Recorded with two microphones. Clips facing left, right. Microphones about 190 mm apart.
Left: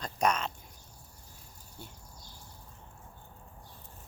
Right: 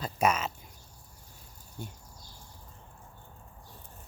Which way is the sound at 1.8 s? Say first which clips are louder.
Right 6 dB; 15° right (ahead or behind).